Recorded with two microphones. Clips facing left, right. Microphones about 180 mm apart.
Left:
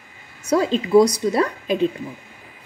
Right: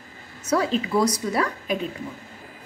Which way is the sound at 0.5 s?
25° left (ahead or behind).